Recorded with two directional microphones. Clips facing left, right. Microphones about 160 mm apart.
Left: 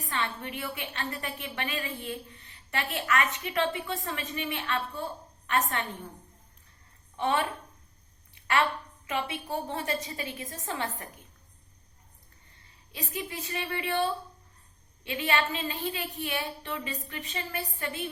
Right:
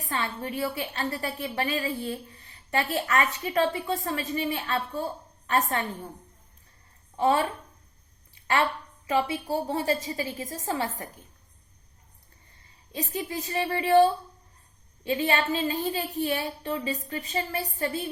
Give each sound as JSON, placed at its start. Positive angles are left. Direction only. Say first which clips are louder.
{"t": 0.1, "sound": "a woman's voice", "louder": "right 3 dB", "side_deg": -35}
{"t": 7.2, "sound": "a woman's voice", "louder": "right 5 dB", "side_deg": -30}
{"t": 8.4, "sound": "a sound", "louder": "right 1 dB", "side_deg": -30}
{"t": 9.0, "sound": "a woman's voice", "louder": "right 7 dB", "side_deg": -30}
{"t": 13.1, "sound": "a woman's voice", "louder": "right 5 dB", "side_deg": -35}